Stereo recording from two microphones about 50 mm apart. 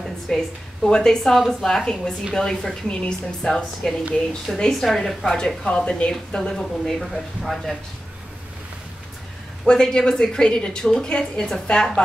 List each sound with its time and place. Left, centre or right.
0.3 s a woman's voice: centre
9.7 s a woman's voice: centre